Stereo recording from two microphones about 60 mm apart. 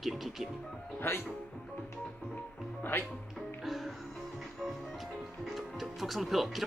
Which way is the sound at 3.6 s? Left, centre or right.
Centre.